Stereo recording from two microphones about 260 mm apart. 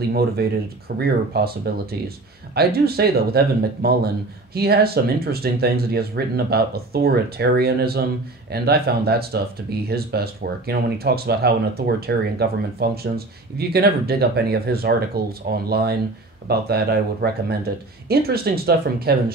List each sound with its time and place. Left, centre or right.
0.4 s speech: right